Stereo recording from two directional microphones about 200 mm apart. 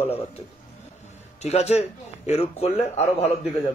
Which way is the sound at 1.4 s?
30° left (ahead or behind).